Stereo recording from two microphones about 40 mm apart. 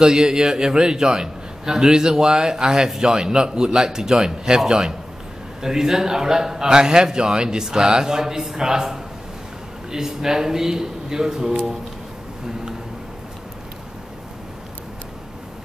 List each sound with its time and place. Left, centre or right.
0.0 s a man's voice: centre